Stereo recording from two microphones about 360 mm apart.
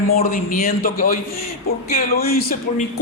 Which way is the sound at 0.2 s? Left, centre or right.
Left.